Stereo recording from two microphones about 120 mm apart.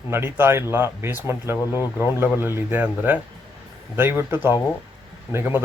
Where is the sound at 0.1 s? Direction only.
20° right (ahead or behind).